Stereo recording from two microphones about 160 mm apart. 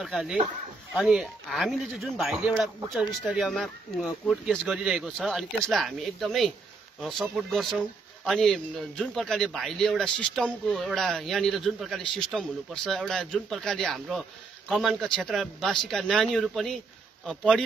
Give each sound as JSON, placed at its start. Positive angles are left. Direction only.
{"t": 0.0, "sound": "speech", "side_deg": 0}